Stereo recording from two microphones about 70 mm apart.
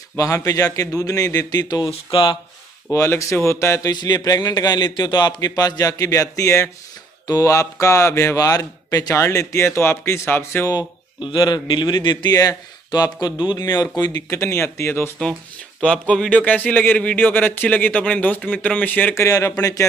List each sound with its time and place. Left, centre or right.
0.1 s a man's voice: left
2.9 s speech: left
3.8 s a man's voice: left
7.8 s speech: left
9.1 s speech: left
10.7 s a man's voice: left
13.9 s speech: left
14.3 s speech: left
15.8 s speech: centre
19.1 s speech: left